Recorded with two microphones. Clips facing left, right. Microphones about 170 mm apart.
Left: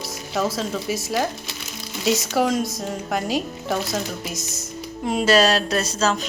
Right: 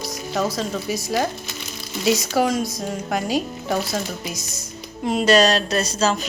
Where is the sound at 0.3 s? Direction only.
Centre (ahead or behind).